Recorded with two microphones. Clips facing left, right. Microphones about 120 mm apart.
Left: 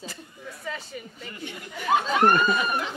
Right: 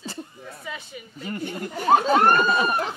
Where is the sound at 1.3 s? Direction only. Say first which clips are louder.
Right 8 dB; 45° right (ahead or behind).